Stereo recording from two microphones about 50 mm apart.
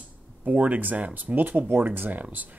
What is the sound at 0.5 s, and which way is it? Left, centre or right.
Speech, right.